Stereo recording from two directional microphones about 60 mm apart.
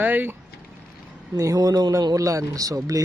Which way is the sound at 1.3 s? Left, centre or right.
Right.